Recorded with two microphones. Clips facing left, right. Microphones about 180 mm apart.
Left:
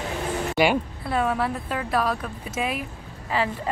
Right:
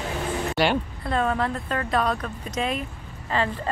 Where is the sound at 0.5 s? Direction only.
10° left (ahead or behind).